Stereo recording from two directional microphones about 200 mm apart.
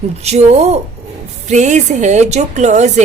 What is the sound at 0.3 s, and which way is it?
A woman's voice, 35° right (ahead or behind).